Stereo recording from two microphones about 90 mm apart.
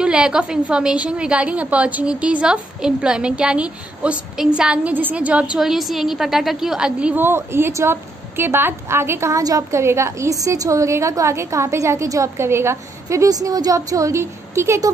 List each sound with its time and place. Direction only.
0.0 s a woman's voice: 10° right (ahead or behind)
7.2 s a woman's voice: 25° right (ahead or behind)